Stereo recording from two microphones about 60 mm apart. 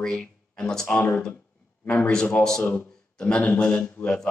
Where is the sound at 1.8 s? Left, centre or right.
Left.